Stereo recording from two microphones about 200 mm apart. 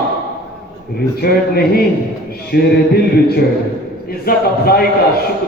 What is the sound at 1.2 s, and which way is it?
A man's voice, 50° left (ahead or behind).